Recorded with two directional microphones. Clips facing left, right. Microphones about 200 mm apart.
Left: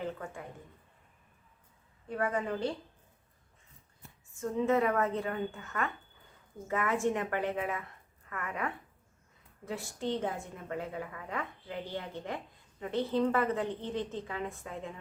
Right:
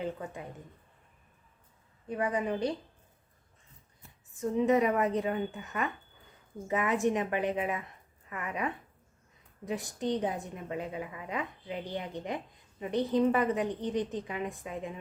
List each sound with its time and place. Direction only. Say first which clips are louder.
0.0 s speech: right 2 dB; 20° right (ahead or behind)
2.0 s a woman's voice: right 2 dB; 15° right (ahead or behind)
4.4 s a woman's voice: right 3 dB; 20° right (ahead or behind)